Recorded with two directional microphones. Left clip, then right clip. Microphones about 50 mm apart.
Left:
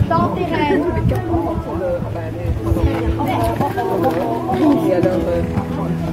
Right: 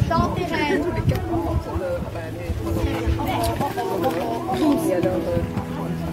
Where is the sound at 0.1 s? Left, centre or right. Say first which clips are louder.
Left 5 dB; centre.